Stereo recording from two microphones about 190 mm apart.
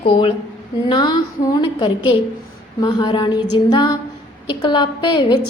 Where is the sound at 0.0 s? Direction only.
30° left (ahead or behind).